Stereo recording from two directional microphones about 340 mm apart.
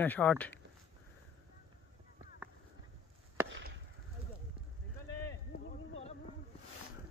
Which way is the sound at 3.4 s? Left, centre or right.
Right.